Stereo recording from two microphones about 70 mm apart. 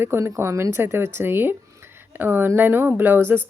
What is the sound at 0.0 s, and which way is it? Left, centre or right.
A woman's voice, right.